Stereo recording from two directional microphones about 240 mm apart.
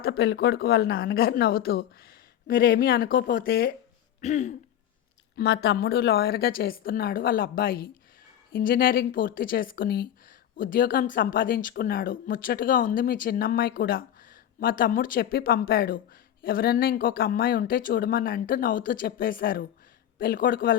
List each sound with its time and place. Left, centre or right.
0.0 s speech: left
4.2 s speech: left
5.4 s speech: left